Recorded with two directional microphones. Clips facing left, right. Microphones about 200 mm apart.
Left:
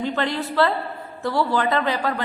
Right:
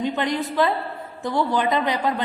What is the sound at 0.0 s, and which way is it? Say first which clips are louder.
A man's voice: right 1 dB; 15° right (ahead or behind).